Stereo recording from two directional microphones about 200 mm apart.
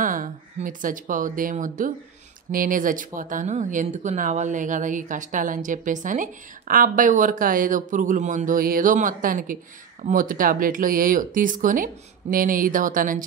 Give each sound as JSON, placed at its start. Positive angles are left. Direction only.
{"t": 0.0, "sound": "speech", "side_deg": -40}